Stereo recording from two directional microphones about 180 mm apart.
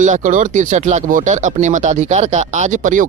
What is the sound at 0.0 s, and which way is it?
Speech, 45° right (ahead or behind).